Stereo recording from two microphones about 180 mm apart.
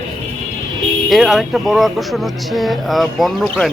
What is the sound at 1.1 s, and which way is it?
Speech, centre (ahead or behind).